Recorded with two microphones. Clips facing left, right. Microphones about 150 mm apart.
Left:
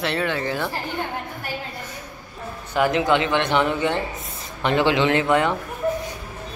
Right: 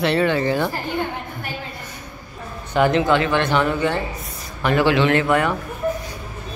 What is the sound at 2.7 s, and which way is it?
Speech, 10° left (ahead or behind).